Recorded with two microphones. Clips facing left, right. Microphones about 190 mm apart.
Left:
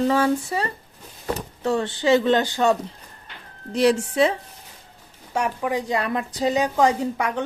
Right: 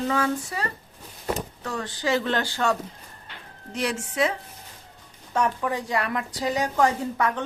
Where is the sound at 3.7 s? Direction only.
35° left (ahead or behind).